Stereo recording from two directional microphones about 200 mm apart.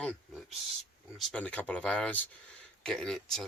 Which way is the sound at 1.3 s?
5° left (ahead or behind).